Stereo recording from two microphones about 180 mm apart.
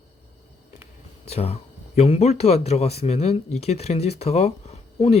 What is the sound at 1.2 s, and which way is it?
Speech, 35° left (ahead or behind).